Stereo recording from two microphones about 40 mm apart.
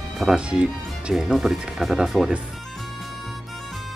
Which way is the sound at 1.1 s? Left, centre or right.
Centre.